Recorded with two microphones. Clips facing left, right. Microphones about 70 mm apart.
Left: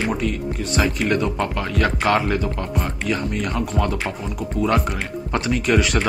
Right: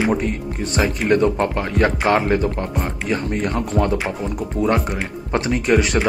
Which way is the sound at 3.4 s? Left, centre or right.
Right.